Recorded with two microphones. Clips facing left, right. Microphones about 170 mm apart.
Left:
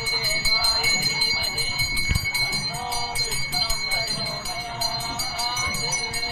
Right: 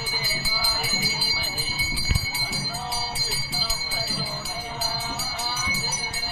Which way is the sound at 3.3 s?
Centre (ahead or behind).